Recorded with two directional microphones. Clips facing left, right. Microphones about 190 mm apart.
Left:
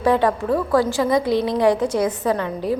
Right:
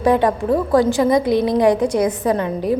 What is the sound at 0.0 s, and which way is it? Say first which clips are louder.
A woman's voice: right 2 dB; 15° right (ahead or behind).